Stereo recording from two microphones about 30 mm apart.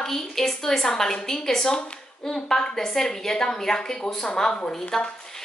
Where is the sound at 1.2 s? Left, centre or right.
Centre.